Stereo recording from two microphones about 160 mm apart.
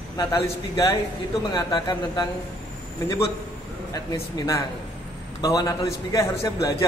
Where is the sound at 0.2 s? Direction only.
20° left (ahead or behind).